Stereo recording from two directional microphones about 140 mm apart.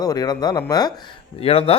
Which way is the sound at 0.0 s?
25° left (ahead or behind).